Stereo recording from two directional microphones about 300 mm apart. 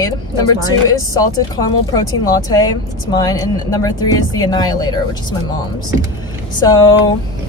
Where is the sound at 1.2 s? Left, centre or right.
Centre.